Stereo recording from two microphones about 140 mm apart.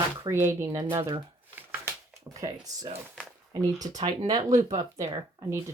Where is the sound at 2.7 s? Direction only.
25° right (ahead or behind).